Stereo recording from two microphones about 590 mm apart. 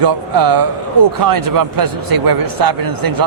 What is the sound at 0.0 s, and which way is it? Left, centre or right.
Speech, right.